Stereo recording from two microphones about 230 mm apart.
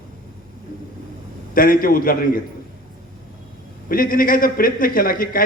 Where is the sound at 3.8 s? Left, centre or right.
Left.